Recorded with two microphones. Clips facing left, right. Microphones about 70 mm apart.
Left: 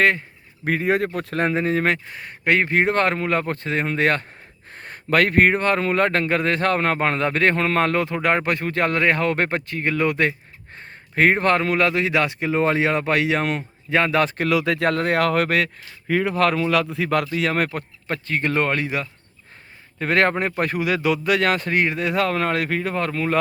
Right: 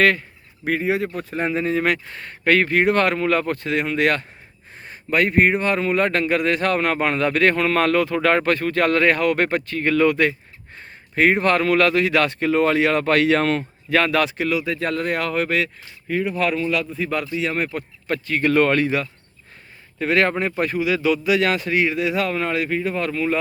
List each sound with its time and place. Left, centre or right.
0.8 s a man's voice: left
1.5 s speech: left
2.0 s speech: centre; by 4.3 s left
4.7 s a sound: left
5.1 s speech: left
10.8 s speech: left
14.3 s a man's voice: left
14.5 s speech: left
16.0 s speech: left
18.1 s speech: left
20.0 s a man's voice: left